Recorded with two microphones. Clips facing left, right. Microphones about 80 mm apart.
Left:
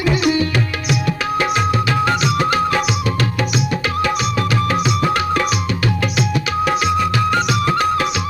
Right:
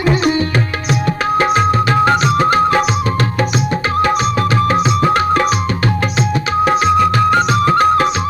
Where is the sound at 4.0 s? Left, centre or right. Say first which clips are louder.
Right 6 dB; right.